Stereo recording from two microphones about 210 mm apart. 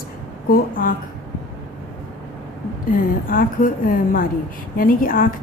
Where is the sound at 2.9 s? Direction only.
40° left (ahead or behind).